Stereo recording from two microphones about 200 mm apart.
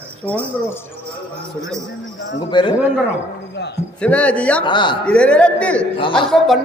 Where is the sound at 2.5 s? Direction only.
25° left (ahead or behind).